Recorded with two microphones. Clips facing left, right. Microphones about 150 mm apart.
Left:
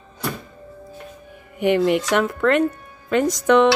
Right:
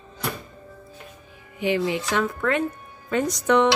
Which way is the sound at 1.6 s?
60° left (ahead or behind).